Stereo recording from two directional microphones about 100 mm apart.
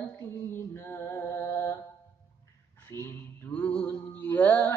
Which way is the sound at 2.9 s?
25° left (ahead or behind).